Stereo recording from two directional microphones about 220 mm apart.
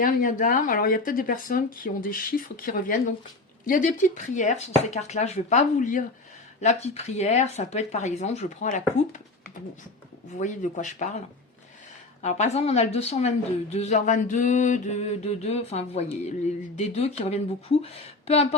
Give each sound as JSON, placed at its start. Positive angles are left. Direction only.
{"t": 0.0, "sound": "speech", "side_deg": 40}
{"t": 10.4, "sound": "speech", "side_deg": 35}
{"t": 12.2, "sound": "a woman's voice", "side_deg": 30}